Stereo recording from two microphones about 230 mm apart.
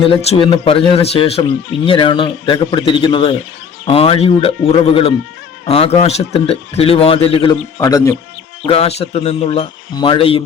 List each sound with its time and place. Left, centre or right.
0.1 s speech: left
8.6 s speech: left